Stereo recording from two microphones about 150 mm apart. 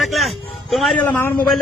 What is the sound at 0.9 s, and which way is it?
Speech, 15° left (ahead or behind).